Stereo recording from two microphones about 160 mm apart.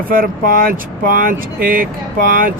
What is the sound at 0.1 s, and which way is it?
Speech, 65° right (ahead or behind).